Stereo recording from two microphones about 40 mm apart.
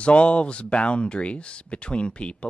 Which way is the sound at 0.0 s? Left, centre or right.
Left.